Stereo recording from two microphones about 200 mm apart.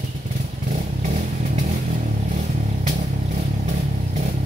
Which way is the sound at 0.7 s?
35° right (ahead or behind).